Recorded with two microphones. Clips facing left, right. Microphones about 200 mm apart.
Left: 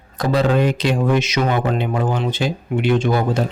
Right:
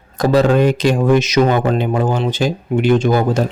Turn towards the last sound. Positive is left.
turn(degrees=-45)  # may be behind; listen again after turning